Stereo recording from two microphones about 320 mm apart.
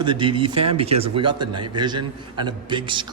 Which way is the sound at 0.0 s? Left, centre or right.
Centre.